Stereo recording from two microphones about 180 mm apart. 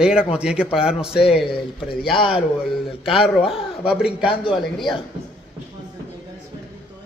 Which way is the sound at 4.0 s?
5° right (ahead or behind).